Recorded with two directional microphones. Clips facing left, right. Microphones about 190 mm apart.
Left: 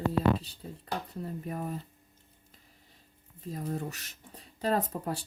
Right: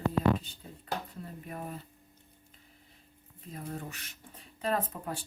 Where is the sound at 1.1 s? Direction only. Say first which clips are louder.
Left 6 dB; 40° left (ahead or behind).